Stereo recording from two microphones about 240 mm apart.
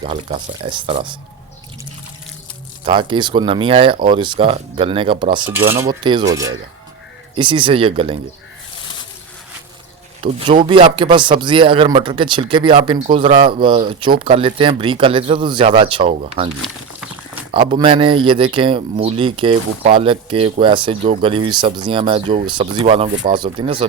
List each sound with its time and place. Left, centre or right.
0.0 s speech: right
2.8 s speech: right
5.5 s cutlery: centre
7.3 s speech: centre
10.2 s speech: right
17.5 s speech: right